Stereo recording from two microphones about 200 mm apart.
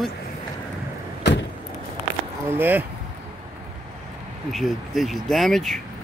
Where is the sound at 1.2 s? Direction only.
60° left (ahead or behind).